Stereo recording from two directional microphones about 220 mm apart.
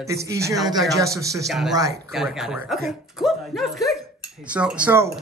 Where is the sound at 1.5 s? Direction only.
Centre (ahead or behind).